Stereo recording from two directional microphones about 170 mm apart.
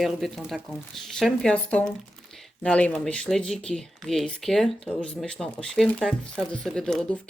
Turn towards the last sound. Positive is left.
turn(degrees=5)  # may be behind; listen again after turning